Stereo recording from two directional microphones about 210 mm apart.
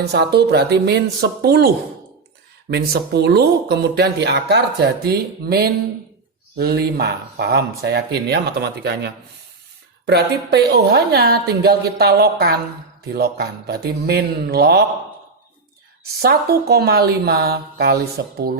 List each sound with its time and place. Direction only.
0.0 s speech: 50° right (ahead or behind)
16.2 s speech: 50° right (ahead or behind)